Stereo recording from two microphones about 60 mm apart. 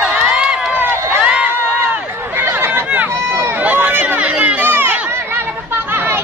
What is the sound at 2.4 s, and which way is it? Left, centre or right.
Run, right.